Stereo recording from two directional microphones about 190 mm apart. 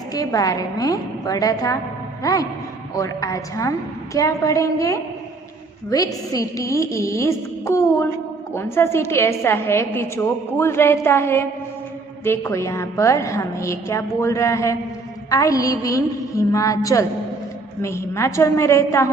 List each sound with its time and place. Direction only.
0.1 s a woman's voice: 20° left (ahead or behind)